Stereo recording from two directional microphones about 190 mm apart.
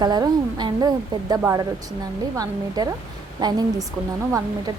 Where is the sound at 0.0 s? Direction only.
20° right (ahead or behind).